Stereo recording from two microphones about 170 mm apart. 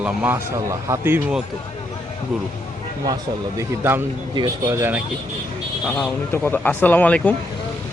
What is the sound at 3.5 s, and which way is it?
Speech, 15° right (ahead or behind).